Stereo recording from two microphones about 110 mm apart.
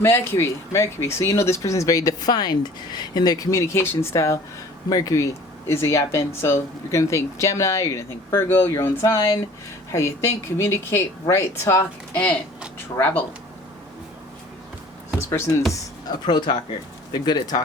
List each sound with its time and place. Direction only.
0.0 s speech: 25° left (ahead or behind)
12.1 s speech: 10° left (ahead or behind)
15.3 s speech: 25° left (ahead or behind)
15.7 s speech: 40° left (ahead or behind)